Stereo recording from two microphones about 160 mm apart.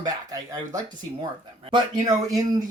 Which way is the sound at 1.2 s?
30° right (ahead or behind).